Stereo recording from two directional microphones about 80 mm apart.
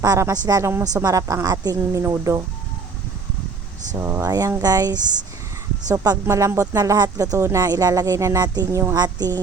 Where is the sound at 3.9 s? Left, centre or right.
Right.